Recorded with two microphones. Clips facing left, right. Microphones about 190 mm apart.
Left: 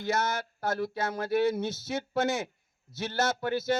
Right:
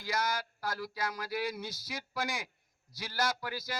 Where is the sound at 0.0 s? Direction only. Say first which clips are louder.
Left 5 dB; 25° left (ahead or behind).